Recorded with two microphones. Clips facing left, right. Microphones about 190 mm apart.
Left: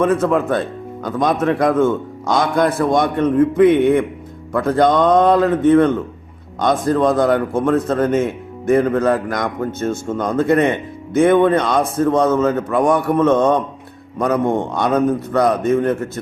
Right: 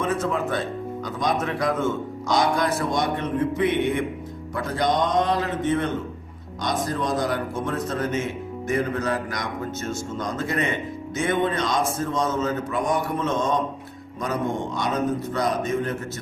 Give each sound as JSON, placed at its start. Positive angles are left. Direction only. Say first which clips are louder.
{"t": 0.0, "sound": "a man's voice", "louder": "left 9 dB", "side_deg": 55}